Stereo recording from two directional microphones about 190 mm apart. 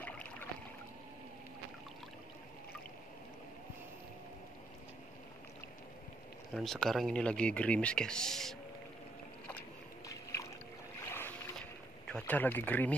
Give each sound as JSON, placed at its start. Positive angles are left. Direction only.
{"t": 0.0, "sound": "boat", "side_deg": 10}
{"t": 6.5, "sound": "speech", "side_deg": 0}
{"t": 9.5, "sound": "boat", "side_deg": 15}
{"t": 12.1, "sound": "speech", "side_deg": 5}